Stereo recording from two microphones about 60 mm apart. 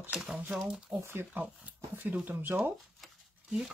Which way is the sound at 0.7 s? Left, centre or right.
Centre.